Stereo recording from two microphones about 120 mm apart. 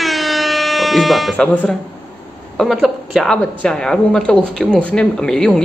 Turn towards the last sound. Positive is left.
turn(degrees=5)  # may be behind; listen again after turning